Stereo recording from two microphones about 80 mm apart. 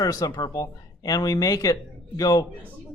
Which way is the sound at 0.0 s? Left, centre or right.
Left.